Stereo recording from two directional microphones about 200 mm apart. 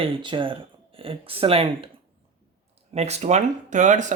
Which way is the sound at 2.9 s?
30° right (ahead or behind).